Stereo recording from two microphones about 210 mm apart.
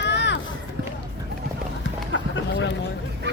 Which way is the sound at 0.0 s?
55° left (ahead or behind).